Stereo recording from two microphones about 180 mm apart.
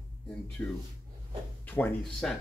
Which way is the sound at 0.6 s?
10° left (ahead or behind).